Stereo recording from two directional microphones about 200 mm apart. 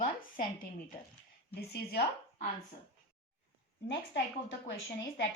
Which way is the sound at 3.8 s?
65° left (ahead or behind).